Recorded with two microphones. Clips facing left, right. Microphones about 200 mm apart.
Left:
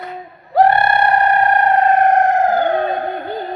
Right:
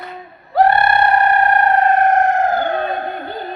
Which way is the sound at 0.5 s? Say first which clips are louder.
Left 1 dB; 20° left (ahead or behind).